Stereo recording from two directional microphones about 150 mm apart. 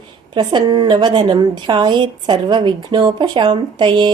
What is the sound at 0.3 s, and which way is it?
A woman's voice, 30° right (ahead or behind).